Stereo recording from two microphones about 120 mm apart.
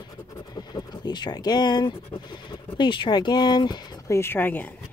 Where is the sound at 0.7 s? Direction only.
40° left (ahead or behind).